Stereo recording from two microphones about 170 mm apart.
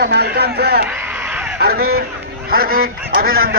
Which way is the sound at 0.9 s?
10° right (ahead or behind).